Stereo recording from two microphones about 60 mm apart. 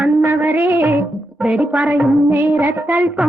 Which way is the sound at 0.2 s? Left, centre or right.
Right.